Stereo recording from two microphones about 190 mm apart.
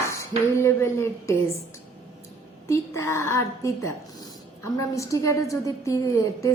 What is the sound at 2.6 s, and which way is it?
A woman's voice, 15° left (ahead or behind).